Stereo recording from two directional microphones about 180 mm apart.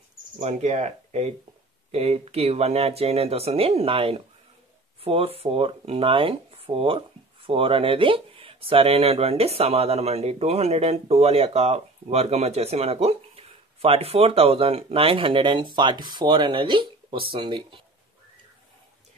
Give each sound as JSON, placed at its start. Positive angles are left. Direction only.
{"t": 0.4, "sound": "speech", "side_deg": -40}